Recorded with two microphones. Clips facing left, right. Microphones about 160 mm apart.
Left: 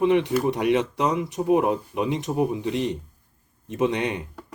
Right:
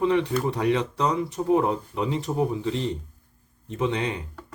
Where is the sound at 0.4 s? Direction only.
15° left (ahead or behind).